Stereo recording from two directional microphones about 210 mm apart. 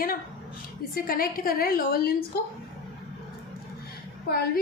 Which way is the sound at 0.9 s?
45° left (ahead or behind).